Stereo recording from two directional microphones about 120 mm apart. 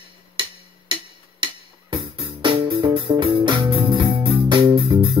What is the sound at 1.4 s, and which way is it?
Music, 45° right (ahead or behind).